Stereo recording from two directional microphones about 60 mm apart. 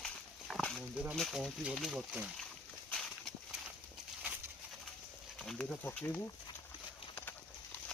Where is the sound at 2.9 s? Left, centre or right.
Centre.